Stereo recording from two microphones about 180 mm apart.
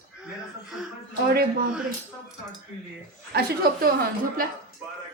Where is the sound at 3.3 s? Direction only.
60° right (ahead or behind).